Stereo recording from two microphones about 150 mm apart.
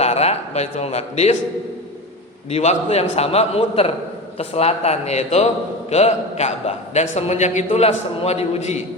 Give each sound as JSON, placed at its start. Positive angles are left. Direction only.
{"t": 0.0, "sound": "a man's voice", "side_deg": 45}
{"t": 2.5, "sound": "a man's voice", "side_deg": 45}